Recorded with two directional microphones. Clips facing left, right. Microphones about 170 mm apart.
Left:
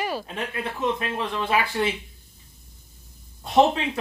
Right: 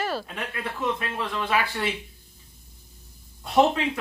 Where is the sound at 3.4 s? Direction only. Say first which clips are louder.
Left 1 dB; 25° left (ahead or behind).